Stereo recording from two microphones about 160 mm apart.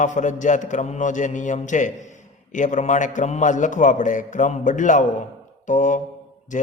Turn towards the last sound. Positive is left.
turn(degrees=55)  # may be behind; listen again after turning